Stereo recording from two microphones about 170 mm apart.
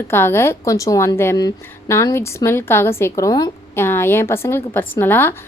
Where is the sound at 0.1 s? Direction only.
15° left (ahead or behind).